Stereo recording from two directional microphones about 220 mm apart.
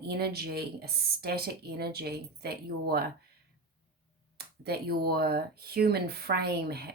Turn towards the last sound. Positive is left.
turn(degrees=-45)  # may be behind; listen again after turning